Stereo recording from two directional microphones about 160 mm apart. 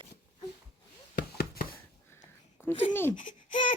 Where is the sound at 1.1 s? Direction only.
70° left (ahead or behind).